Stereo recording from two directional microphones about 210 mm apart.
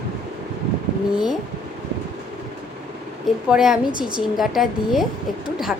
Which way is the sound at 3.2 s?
Centre (ahead or behind).